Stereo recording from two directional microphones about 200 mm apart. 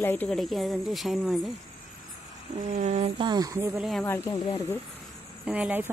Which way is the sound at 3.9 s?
10° left (ahead or behind).